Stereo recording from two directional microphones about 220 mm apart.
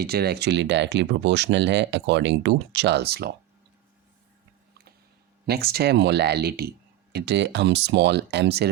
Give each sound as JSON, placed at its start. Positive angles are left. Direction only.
{"t": 0.0, "sound": "speech", "side_deg": -45}
{"t": 5.5, "sound": "speech", "side_deg": -45}